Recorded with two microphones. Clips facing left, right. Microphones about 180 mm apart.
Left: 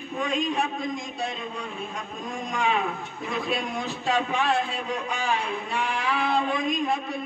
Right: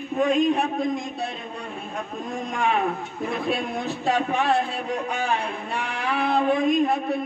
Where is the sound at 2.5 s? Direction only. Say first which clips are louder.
Right 2 dB; 55° right (ahead or behind).